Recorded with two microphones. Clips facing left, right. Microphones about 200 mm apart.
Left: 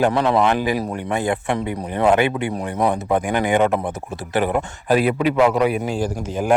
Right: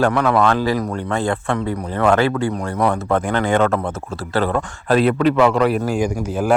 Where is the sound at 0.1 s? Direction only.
25° left (ahead or behind); by 5.8 s 5° left (ahead or behind).